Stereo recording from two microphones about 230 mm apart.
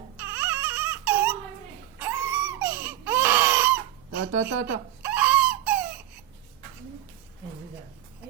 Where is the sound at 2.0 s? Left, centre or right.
Centre.